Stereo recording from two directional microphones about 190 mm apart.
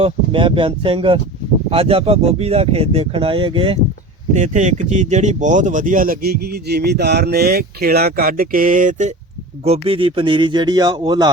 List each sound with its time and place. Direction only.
0.0 s speech: 25° right (ahead or behind)
4.4 s speech: 40° right (ahead or behind); by 11.3 s 20° right (ahead or behind)